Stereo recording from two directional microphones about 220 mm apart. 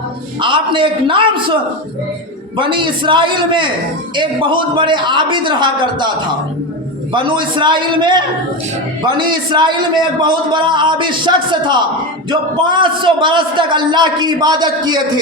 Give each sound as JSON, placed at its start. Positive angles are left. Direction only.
{"t": 0.3, "sound": "a man's voice", "side_deg": -20}
{"t": 2.6, "sound": "a man's voice", "side_deg": -20}
{"t": 7.1, "sound": "a man's voice", "side_deg": -20}